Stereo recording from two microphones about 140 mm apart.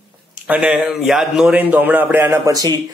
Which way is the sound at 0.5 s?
5° right (ahead or behind).